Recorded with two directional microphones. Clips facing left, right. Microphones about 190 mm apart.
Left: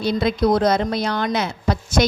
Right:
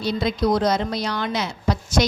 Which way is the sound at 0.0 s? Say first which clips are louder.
Left 3 dB; 55° left (ahead or behind).